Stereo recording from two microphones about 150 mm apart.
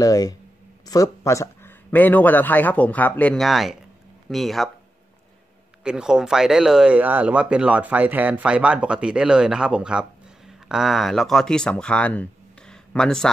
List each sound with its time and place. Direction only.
0.0 s a man's voice: 25° left (ahead or behind); by 4.6 s centre (ahead or behind)
5.9 s speech: 5° right (ahead or behind)